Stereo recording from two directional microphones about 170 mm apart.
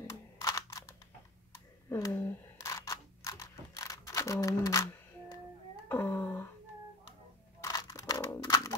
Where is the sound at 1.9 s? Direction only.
15° left (ahead or behind).